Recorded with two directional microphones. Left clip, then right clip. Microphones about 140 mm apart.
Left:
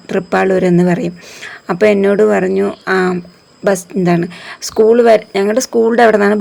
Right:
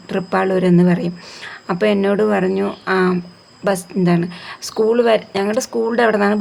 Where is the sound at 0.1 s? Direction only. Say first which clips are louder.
Left 5 dB; 30° left (ahead or behind).